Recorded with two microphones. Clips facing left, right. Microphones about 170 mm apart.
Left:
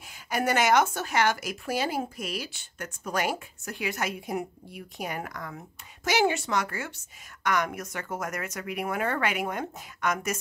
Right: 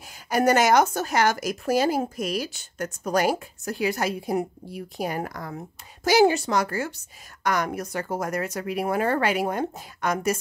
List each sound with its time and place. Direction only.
0.1 s a woman's voice: 40° right (ahead or behind)